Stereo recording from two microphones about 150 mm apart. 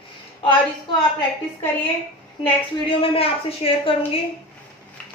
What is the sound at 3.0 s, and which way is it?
Speech, 40° left (ahead or behind).